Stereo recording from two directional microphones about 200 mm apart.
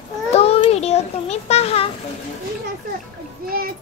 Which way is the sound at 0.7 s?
30° left (ahead or behind).